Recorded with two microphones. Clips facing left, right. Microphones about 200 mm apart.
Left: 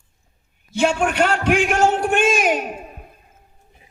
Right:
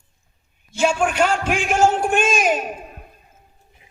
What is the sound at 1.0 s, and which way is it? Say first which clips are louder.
A man's voice: left 1 dB; 60° left (ahead or behind).